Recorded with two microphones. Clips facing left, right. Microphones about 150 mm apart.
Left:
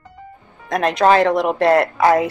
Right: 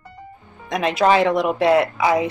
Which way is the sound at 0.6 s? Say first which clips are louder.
Left 2 dB; centre (ahead or behind).